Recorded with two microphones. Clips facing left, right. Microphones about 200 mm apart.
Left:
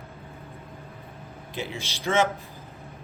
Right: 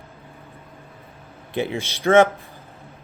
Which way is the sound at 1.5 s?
60° right (ahead or behind).